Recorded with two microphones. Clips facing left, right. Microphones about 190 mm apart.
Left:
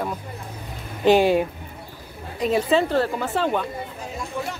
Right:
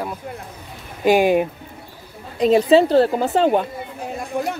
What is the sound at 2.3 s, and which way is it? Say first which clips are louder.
A woman's voice: right 7 dB; 35° right (ahead or behind).